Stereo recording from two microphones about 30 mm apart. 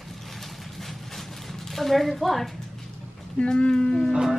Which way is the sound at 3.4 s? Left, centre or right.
Left.